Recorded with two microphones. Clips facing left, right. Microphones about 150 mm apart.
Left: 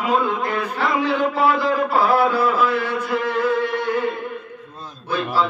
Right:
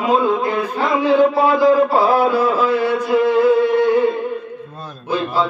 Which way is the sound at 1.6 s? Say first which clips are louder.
Right 6 dB; 10° right (ahead or behind).